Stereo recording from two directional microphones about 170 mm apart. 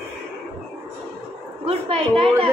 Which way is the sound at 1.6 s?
35° right (ahead or behind).